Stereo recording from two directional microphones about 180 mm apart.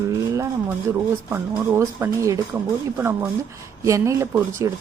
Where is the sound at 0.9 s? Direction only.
15° right (ahead or behind).